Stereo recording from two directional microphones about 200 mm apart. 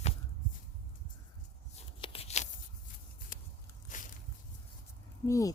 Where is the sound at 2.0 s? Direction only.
30° left (ahead or behind).